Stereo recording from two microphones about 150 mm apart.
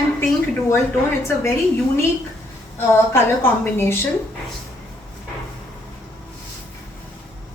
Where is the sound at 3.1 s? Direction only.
15° left (ahead or behind).